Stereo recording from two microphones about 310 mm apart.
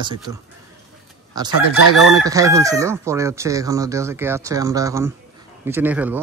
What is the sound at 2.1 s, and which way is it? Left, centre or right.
Chicken, centre.